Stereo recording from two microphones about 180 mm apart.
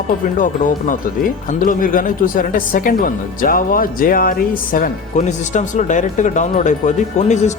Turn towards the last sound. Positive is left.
turn(degrees=40)  # may be behind; listen again after turning